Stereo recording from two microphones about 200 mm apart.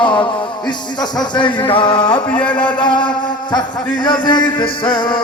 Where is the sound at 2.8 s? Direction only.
25° left (ahead or behind).